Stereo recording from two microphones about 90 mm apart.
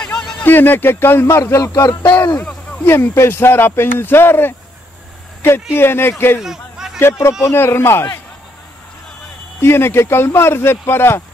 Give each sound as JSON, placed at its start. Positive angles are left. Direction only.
{"t": 0.0, "sound": "a sound", "side_deg": 10}
{"t": 0.4, "sound": "speech", "side_deg": 20}
{"t": 2.9, "sound": "speech", "side_deg": 25}
{"t": 6.4, "sound": "a sound", "side_deg": -5}
{"t": 7.0, "sound": "speech", "side_deg": 30}
{"t": 9.6, "sound": "speech", "side_deg": 25}